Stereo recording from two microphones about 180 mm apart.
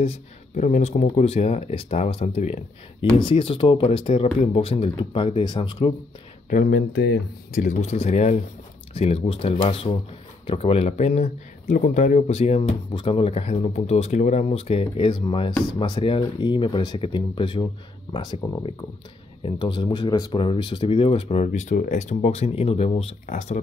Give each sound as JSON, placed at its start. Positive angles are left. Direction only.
{"t": 0.6, "sound": "speech", "side_deg": 40}
{"t": 6.5, "sound": "speech", "side_deg": 55}
{"t": 7.6, "sound": "speech", "side_deg": 45}